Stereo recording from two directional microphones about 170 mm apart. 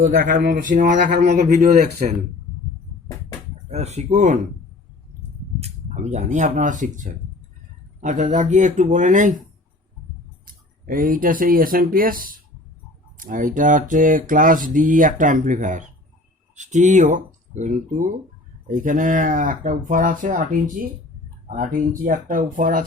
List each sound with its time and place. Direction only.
0.0 s speech: 55° right (ahead or behind)
3.7 s speech: 40° right (ahead or behind)
5.5 s speech: 40° right (ahead or behind)
10.4 s speech: 55° right (ahead or behind)